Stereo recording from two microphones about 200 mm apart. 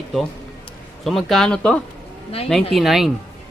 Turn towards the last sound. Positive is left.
turn(degrees=0)  # may be behind; listen again after turning